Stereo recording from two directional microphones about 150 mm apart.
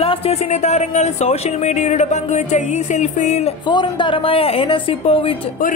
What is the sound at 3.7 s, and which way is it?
Speech, 30° left (ahead or behind).